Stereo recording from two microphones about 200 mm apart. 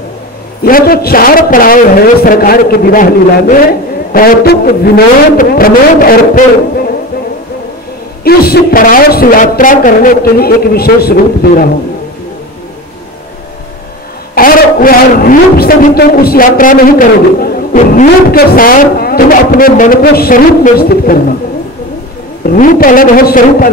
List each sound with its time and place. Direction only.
0.7 s a man's voice: 45° left (ahead or behind)
8.2 s a man's voice: 50° left (ahead or behind)
14.3 s a man's voice: 45° left (ahead or behind)
22.4 s a man's voice: 45° left (ahead or behind)